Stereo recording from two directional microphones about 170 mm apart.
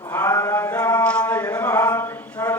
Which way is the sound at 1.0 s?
5° left (ahead or behind).